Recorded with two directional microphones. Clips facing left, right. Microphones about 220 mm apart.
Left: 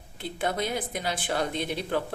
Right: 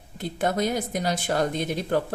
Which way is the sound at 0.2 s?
45° right (ahead or behind).